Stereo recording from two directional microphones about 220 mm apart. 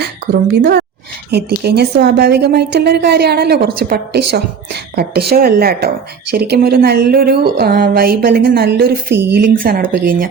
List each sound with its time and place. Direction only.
0.3 s a woman's voice: 40° right (ahead or behind)